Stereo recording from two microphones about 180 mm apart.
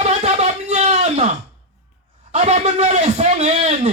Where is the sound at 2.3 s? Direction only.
40° right (ahead or behind).